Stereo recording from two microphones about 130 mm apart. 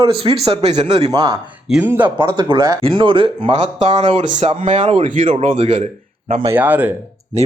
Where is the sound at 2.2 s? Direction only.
35° right (ahead or behind).